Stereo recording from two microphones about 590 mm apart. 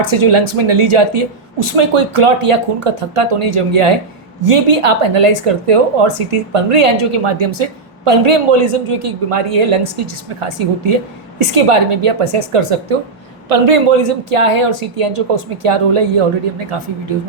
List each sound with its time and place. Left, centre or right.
0.0 s a woman's voice: right
11.3 s a woman's voice: right